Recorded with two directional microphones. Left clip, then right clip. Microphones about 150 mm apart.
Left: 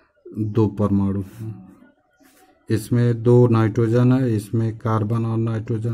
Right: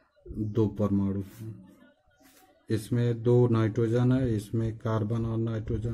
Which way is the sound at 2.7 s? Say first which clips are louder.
Left 8 dB; 30° left (ahead or behind).